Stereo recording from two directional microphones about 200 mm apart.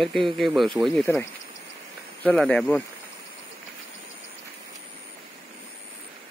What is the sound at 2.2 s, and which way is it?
Speech, 5° left (ahead or behind).